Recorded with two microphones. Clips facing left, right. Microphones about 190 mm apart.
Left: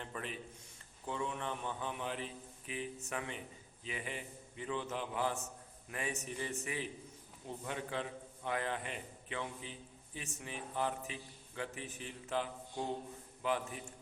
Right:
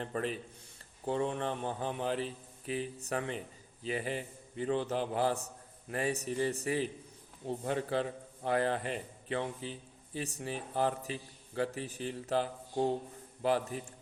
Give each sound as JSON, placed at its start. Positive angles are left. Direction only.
{"t": 0.0, "sound": "a man's voice", "side_deg": -35}